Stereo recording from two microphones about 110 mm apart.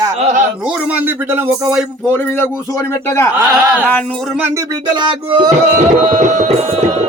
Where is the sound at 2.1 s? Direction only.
20° left (ahead or behind).